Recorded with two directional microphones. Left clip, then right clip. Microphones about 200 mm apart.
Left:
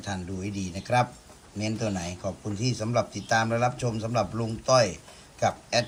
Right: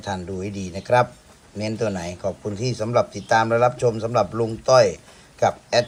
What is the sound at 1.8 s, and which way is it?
Speech, 15° left (ahead or behind).